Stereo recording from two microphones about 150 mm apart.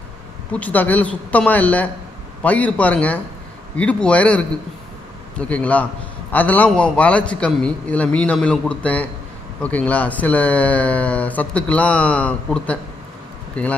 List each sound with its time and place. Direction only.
0.5 s speech: 10° left (ahead or behind)
5.5 s speech: 10° left (ahead or behind)